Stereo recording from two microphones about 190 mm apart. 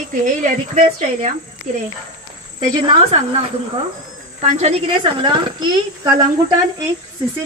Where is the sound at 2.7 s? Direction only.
25° right (ahead or behind).